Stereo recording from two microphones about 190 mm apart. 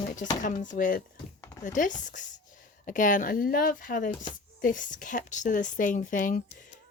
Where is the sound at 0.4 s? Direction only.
40° left (ahead or behind).